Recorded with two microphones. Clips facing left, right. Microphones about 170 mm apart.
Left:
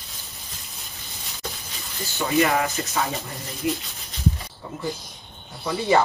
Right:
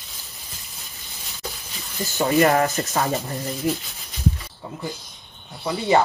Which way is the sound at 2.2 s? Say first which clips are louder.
Right 4 dB; 40° right (ahead or behind).